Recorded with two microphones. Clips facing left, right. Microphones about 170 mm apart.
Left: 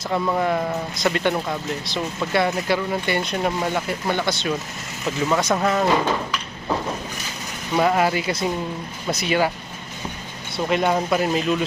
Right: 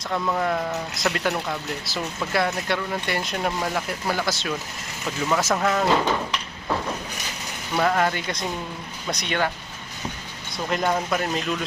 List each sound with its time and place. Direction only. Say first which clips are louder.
0.1 s speech: left 3 dB; 5° left (ahead or behind)
7.8 s speech: left 3 dB; 10° left (ahead or behind)
10.7 s speech: left 3 dB; 5° left (ahead or behind)